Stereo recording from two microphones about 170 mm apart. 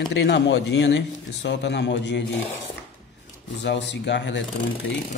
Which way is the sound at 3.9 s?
90° left.